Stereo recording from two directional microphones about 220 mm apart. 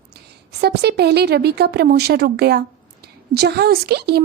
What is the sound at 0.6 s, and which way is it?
Speech, 50° right (ahead or behind).